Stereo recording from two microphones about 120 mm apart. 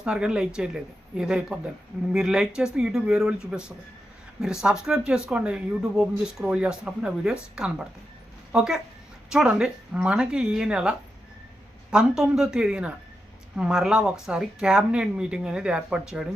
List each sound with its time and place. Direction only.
0.0 s a woman's voice: 10° right (ahead or behind)
4.4 s a woman's voice: 5° right (ahead or behind)